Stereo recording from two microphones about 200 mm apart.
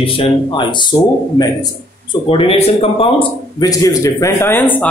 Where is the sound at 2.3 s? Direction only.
30° left (ahead or behind).